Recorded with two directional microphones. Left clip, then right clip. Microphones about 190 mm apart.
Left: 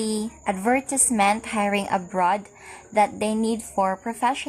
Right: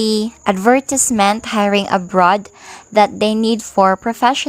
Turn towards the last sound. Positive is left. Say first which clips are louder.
# right 9 dB
turn(degrees=-40)  # may be behind; listen again after turning